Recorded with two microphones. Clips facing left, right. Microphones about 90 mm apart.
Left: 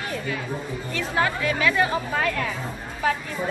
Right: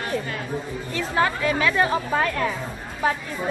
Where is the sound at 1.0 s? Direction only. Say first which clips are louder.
Right 2 dB; 30° right (ahead or behind).